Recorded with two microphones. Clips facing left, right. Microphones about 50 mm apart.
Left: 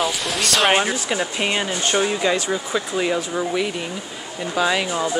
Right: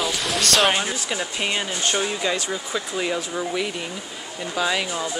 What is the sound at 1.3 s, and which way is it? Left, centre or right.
Speech, left.